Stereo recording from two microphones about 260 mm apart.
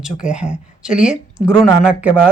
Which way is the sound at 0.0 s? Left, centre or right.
Centre.